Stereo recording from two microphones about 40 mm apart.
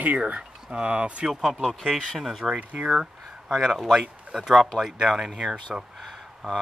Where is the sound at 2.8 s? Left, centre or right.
Centre.